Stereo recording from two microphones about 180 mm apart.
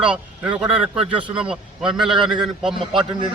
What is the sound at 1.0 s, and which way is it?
Speech, 30° right (ahead or behind).